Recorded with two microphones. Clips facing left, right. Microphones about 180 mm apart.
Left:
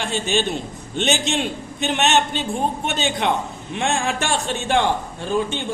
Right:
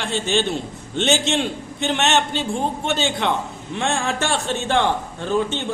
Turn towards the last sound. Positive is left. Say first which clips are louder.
# right 1 dB
turn(degrees=15)  # may be behind; listen again after turning